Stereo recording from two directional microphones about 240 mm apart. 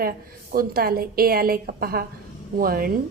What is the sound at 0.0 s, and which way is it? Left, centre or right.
A woman's voice, right.